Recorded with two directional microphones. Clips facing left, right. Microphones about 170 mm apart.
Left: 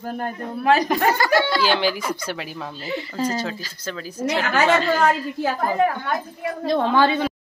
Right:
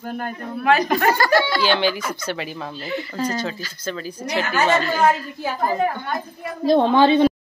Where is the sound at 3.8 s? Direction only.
5° left (ahead or behind).